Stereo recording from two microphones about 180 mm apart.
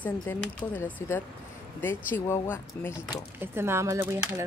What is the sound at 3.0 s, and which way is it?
Speech, 10° right (ahead or behind).